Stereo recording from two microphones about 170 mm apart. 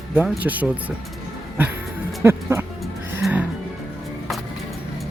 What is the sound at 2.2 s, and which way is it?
Speech, 15° right (ahead or behind).